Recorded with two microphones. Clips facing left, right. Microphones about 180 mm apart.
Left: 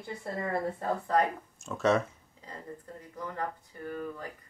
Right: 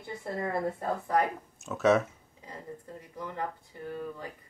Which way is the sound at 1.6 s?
Centre (ahead or behind).